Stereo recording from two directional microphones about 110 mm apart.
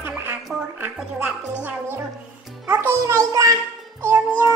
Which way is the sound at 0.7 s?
15° right (ahead or behind).